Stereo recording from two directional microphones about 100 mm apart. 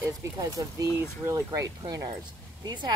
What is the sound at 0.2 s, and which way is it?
Speech, 35° right (ahead or behind).